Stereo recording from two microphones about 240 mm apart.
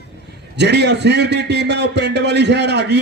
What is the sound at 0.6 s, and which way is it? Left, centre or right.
A man's voice, right.